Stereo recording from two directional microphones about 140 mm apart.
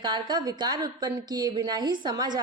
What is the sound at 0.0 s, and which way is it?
A woman's voice, 30° right (ahead or behind).